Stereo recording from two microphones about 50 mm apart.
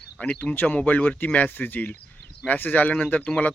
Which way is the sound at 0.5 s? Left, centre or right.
Left.